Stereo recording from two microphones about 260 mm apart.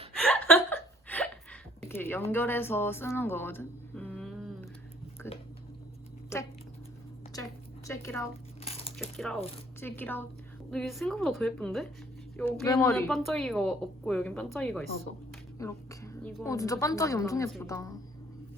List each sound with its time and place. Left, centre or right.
0.2 s chuckle: centre
1.9 s speech: centre
5.2 s a sound: centre
6.3 s speech: centre
7.9 s speech: centre
8.6 s crumpling: left
9.0 s speech: centre
12.6 s speech: centre
15.5 s a sound: centre
16.4 s speech: centre